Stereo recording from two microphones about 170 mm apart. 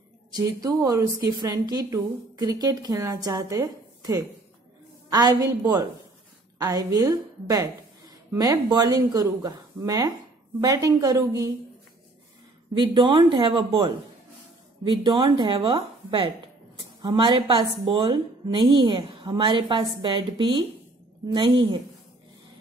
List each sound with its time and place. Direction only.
0.3 s a woman's voice: 20° right (ahead or behind)
12.7 s a woman's voice: 25° right (ahead or behind)